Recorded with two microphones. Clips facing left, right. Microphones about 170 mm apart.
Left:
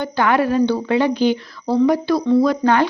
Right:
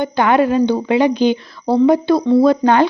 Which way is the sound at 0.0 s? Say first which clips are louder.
Right 3 dB; 20° right (ahead or behind).